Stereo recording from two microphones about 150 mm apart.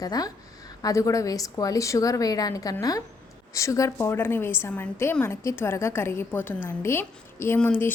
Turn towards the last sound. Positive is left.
turn(degrees=10)  # may be behind; listen again after turning